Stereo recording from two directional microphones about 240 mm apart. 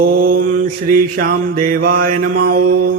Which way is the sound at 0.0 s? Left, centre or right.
Right.